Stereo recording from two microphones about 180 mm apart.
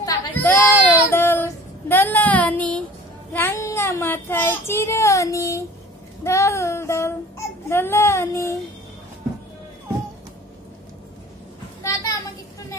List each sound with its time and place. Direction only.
0.3 s child singing: 10° left (ahead or behind)
3.3 s speech: 15° left (ahead or behind)
11.8 s children playing: 20° left (ahead or behind)